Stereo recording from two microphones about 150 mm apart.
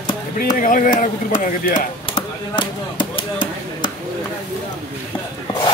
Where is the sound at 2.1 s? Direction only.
35° left (ahead or behind).